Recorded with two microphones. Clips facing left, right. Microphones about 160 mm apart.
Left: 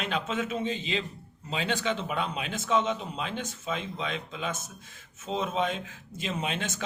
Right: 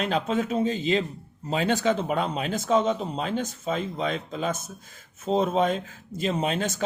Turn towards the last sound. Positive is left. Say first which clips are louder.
# right 7 dB
turn(degrees=-40)  # may be behind; listen again after turning